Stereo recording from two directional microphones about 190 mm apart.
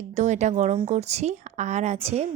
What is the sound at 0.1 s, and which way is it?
Speech, 35° right (ahead or behind).